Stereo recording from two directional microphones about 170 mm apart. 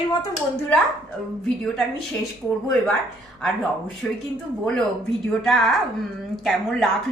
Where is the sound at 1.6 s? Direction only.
Centre (ahead or behind).